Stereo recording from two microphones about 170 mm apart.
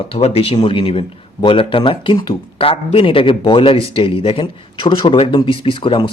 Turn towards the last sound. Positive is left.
turn(degrees=30)  # may be behind; listen again after turning